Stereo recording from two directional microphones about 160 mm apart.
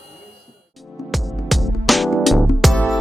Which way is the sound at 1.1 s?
Centre (ahead or behind).